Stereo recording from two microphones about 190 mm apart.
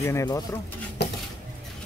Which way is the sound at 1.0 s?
60° left (ahead or behind).